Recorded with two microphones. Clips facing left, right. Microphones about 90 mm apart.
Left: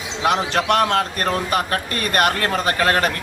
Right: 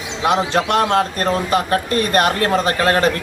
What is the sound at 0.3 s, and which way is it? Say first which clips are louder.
Speech: right 2 dB; 30° right (ahead or behind).